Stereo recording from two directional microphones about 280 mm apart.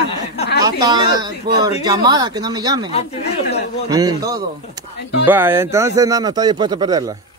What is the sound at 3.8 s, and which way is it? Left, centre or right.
Speech, centre.